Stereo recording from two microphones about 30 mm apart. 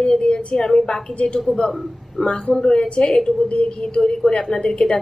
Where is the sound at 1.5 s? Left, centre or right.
Left.